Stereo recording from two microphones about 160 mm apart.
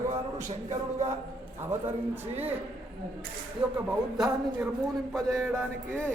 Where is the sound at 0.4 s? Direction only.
45° right (ahead or behind).